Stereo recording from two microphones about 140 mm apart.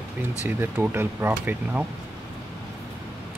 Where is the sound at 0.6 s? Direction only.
15° right (ahead or behind).